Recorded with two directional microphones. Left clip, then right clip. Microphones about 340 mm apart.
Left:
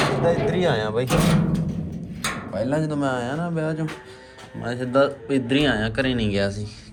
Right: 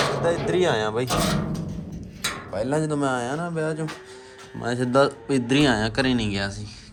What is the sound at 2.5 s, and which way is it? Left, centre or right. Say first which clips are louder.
Speech: even; centre.